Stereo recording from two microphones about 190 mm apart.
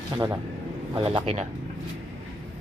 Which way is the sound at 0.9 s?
30° right (ahead or behind).